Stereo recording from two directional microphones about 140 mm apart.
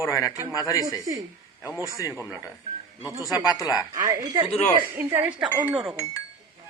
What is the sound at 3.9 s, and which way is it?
Speech, 25° right (ahead or behind).